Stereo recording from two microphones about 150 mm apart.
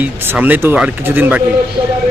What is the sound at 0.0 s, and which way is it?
Speech, 10° right (ahead or behind).